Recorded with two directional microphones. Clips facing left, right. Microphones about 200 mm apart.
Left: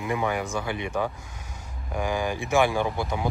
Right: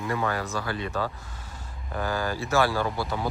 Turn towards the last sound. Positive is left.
turn(degrees=15)  # may be behind; listen again after turning